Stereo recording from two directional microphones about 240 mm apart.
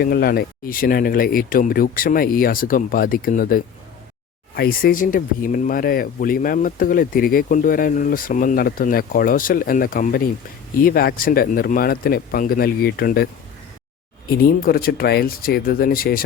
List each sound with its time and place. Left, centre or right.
0.0 s speech: left
14.3 s speech: left